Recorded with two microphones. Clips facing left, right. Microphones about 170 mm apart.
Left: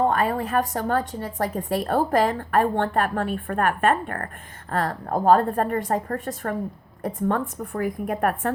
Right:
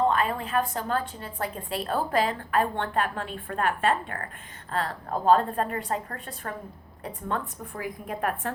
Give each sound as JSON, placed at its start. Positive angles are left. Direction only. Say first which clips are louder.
{"t": 0.1, "sound": "a woman's voice", "louder": "left 4 dB", "side_deg": 45}